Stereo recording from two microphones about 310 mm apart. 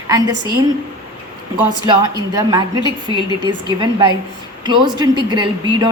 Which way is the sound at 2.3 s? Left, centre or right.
Centre.